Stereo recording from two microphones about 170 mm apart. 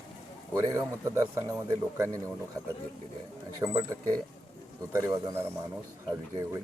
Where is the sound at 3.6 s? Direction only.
20° right (ahead or behind).